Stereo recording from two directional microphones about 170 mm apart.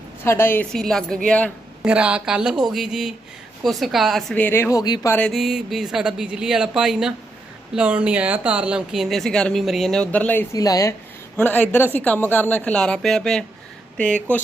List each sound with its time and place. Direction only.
0.3 s speech: 15° left (ahead or behind)
1.8 s speech: 5° right (ahead or behind)
4.4 s speech: 10° left (ahead or behind)
5.1 s speech: 5° left (ahead or behind)
10.5 s speech: 20° left (ahead or behind)